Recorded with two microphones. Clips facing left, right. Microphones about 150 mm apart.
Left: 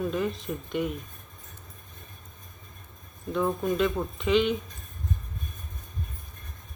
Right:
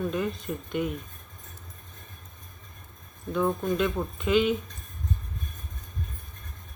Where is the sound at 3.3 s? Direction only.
Centre (ahead or behind).